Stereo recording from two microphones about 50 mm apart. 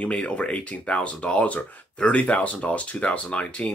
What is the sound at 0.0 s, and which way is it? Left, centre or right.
Speech, left.